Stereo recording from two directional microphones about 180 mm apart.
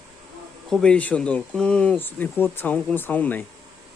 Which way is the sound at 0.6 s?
5° left (ahead or behind).